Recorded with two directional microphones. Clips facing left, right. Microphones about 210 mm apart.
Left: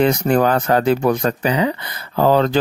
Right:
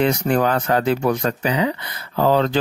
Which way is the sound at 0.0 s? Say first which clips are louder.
Left 3 dB; 45° left (ahead or behind).